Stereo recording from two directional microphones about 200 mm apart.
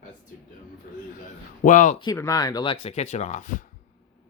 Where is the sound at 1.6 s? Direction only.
40° left (ahead or behind).